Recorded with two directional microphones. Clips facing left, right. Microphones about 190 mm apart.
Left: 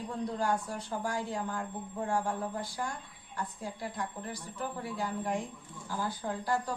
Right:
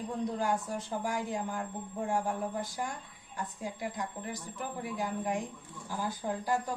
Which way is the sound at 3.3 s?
20° right (ahead or behind).